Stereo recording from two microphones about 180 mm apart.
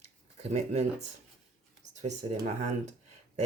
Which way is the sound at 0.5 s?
40° right (ahead or behind).